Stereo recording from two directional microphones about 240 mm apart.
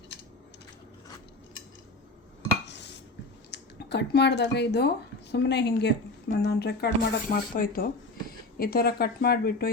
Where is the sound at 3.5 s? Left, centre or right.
Left.